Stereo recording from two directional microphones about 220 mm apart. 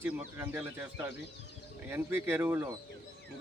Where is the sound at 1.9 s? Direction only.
10° right (ahead or behind).